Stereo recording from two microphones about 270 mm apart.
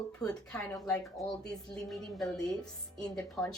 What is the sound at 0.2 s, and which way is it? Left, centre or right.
A woman's voice, centre.